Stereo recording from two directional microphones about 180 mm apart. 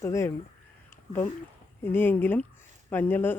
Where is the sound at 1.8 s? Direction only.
10° left (ahead or behind).